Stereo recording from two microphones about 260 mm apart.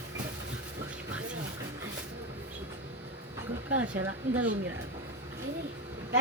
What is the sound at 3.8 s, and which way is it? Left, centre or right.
Speech, right.